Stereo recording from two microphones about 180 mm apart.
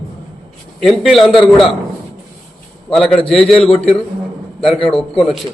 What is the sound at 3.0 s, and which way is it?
Speech, 5° left (ahead or behind).